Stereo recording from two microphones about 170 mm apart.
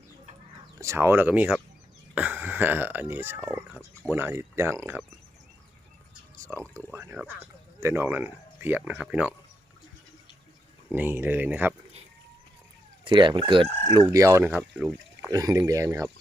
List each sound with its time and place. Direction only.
0.8 s speech: 15° right (ahead or behind)
6.3 s a sound: 15° right (ahead or behind)
6.6 s speech: 5° left (ahead or behind)
6.9 s speech: 15° right (ahead or behind)
10.9 s speech: 10° right (ahead or behind)
13.1 s speech: 30° right (ahead or behind); by 14.9 s 10° right (ahead or behind)
15.3 s speech: 20° right (ahead or behind)